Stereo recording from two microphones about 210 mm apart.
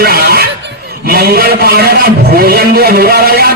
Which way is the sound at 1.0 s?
45° right (ahead or behind).